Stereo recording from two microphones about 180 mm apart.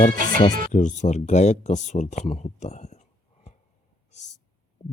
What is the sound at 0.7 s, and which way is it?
Speech, 45° left (ahead or behind).